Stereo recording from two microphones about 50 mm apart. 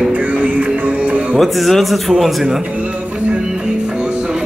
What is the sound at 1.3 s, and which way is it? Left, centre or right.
A man's voice, centre.